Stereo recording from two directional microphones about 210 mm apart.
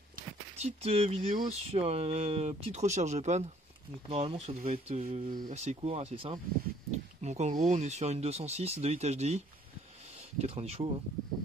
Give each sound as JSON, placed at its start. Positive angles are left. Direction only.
{"t": 0.6, "sound": "speech", "side_deg": -30}
{"t": 10.4, "sound": "speech", "side_deg": -30}